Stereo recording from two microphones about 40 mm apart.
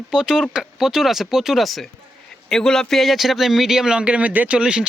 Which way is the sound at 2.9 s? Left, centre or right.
Centre.